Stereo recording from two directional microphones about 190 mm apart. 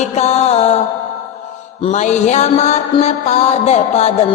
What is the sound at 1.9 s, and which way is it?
Mantra, 40° left (ahead or behind).